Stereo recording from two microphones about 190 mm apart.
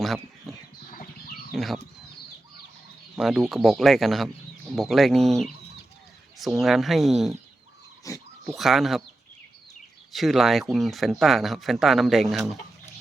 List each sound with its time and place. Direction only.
0.0 s a sound: centre (ahead or behind)
1.5 s speech: centre (ahead or behind)
3.2 s speech: centre (ahead or behind)
8.1 s speech: 15° left (ahead or behind)
8.4 s speech: centre (ahead or behind)
10.1 s speech: centre (ahead or behind)